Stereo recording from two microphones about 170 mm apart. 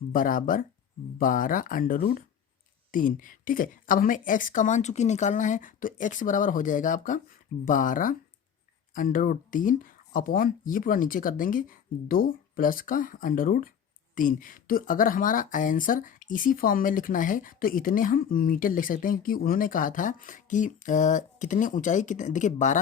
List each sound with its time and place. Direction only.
0.1 s a woman's voice: 55° left (ahead or behind)